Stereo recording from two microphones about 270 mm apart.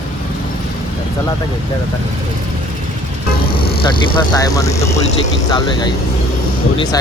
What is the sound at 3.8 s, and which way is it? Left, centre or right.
Speech, centre.